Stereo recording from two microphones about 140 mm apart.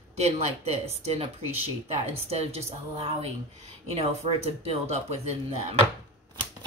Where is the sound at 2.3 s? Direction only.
45° right (ahead or behind).